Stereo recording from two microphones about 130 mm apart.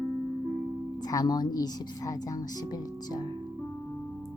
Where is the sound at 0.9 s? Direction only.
30° left (ahead or behind).